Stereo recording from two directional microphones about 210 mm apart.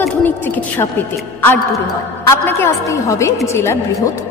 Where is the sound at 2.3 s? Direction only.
15° left (ahead or behind).